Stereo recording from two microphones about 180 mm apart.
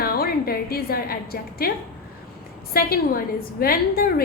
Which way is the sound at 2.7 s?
55° left (ahead or behind).